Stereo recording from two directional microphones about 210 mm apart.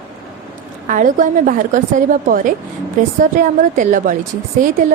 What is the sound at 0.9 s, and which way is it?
A woman's voice, 40° right (ahead or behind).